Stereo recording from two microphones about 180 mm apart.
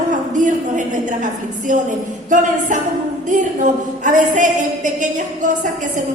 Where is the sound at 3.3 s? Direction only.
45° right (ahead or behind).